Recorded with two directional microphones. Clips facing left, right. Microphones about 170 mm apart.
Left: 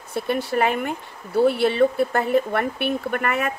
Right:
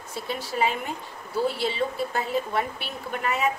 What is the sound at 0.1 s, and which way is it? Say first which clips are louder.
Speech: left 8 dB; 60° left (ahead or behind).